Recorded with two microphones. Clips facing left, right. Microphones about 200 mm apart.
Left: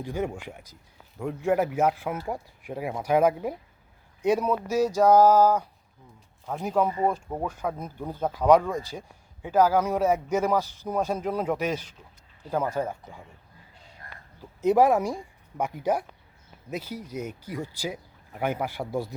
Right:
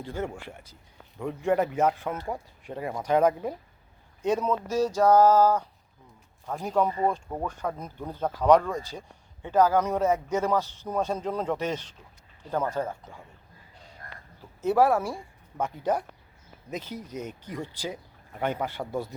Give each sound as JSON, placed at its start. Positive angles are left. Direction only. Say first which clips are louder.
{"t": 0.0, "sound": "speech", "louder": "left 3 dB", "side_deg": 15}
{"t": 14.6, "sound": "speech", "louder": "left 2 dB", "side_deg": 15}